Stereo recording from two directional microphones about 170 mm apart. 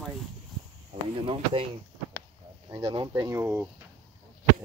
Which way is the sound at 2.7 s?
30° right (ahead or behind).